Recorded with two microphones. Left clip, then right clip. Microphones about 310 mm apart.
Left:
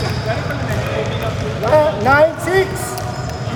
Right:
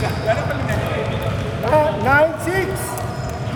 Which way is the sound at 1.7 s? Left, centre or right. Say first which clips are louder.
Left 3 dB; left.